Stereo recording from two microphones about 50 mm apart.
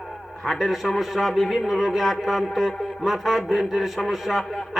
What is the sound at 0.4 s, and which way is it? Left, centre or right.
A man's voice, centre.